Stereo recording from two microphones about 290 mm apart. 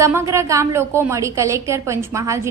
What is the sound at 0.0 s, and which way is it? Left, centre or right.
A woman's voice, centre.